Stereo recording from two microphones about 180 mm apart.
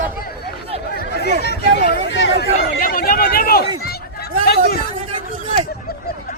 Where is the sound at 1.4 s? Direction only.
65° left (ahead or behind).